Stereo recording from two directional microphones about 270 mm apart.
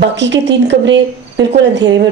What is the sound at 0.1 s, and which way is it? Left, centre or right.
Speech, right.